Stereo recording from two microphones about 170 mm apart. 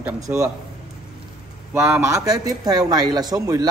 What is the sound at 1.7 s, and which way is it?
A man's voice, 10° right (ahead or behind).